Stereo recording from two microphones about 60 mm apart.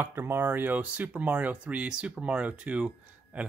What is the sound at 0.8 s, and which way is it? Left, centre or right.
Speech, right.